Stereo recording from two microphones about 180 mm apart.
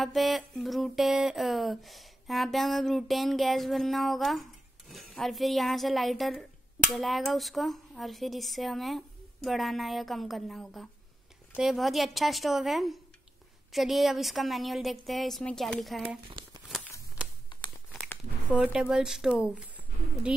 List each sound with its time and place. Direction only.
0.0 s speech: centre (ahead or behind)
16.4 s crumpling: 25° right (ahead or behind)
17.5 s crumpling: 25° left (ahead or behind)
17.9 s a sound: 10° left (ahead or behind)
18.5 s speech: 5° right (ahead or behind)